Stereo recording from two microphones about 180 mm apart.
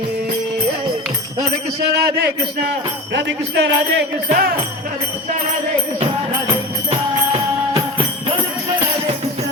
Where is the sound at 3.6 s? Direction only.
65° right (ahead or behind).